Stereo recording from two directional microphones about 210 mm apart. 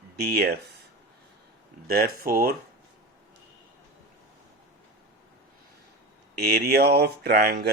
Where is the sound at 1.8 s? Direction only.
45° right (ahead or behind).